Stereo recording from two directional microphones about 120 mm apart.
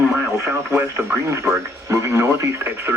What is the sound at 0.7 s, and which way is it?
Speech, 20° right (ahead or behind).